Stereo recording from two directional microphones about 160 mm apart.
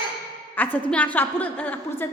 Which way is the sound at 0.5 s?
10° left (ahead or behind).